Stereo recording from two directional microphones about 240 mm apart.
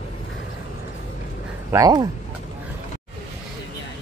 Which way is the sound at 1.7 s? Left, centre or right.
Centre.